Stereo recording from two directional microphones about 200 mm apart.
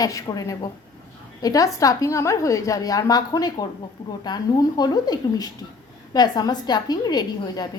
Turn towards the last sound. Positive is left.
turn(degrees=20)  # may be behind; listen again after turning